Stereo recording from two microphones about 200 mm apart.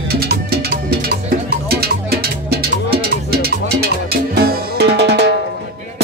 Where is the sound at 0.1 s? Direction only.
50° right (ahead or behind).